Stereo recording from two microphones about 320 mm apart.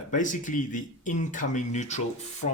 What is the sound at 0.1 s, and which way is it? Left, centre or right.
Speech, left.